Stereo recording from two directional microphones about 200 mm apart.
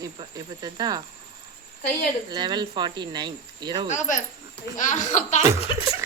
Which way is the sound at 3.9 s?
40° left (ahead or behind).